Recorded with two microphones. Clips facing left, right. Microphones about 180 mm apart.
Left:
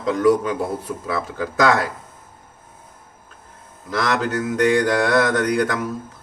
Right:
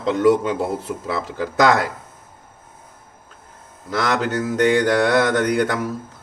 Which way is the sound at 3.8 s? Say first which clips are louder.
Right 1 dB; 25° right (ahead or behind).